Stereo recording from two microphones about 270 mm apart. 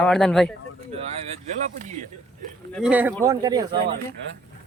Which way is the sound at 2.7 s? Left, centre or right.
Centre.